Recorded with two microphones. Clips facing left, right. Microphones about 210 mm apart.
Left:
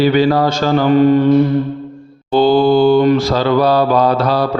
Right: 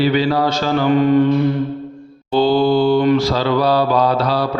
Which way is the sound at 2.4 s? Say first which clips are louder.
Left 3 dB; 50° left (ahead or behind).